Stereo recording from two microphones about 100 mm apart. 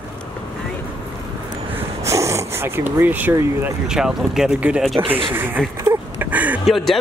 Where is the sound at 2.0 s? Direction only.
30° right (ahead or behind).